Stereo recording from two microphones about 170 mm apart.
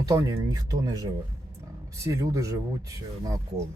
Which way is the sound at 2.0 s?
20° right (ahead or behind).